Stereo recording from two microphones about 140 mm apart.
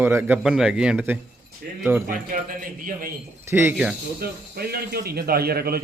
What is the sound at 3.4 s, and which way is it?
Speech, 15° right (ahead or behind).